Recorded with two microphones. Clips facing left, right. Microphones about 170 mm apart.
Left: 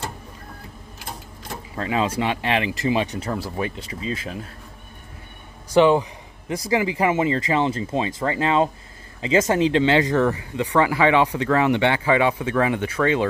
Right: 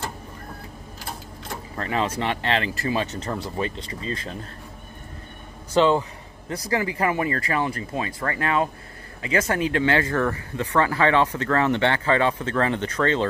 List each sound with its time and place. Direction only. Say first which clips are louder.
1.8 s speech: left 3 dB; 15° left (ahead or behind)
5.7 s speech: left 3 dB; 15° left (ahead or behind)